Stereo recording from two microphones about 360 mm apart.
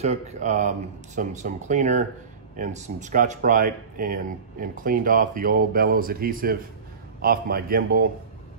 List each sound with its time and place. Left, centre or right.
0.0 s speech: centre